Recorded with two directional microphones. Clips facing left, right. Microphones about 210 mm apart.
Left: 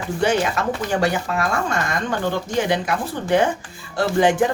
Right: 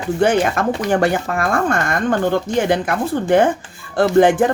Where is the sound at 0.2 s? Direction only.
50° right (ahead or behind).